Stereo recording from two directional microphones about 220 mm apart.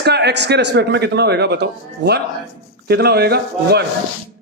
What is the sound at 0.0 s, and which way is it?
A man's voice, 50° right (ahead or behind).